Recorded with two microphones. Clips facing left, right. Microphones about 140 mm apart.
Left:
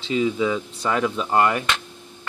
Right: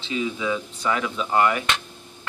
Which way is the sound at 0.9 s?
45° left (ahead or behind).